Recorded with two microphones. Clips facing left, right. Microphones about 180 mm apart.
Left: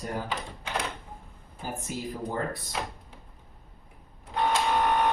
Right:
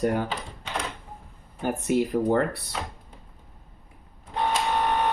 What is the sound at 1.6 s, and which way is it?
Speech, 70° right (ahead or behind).